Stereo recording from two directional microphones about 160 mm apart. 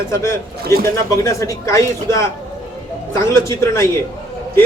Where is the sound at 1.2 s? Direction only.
20° left (ahead or behind).